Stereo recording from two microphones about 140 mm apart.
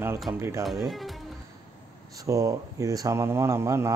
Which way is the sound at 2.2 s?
25° right (ahead or behind).